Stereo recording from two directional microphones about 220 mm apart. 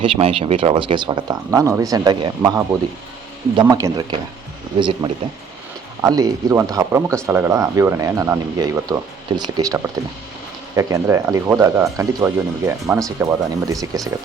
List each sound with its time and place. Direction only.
0.0 s speech: 25° right (ahead or behind)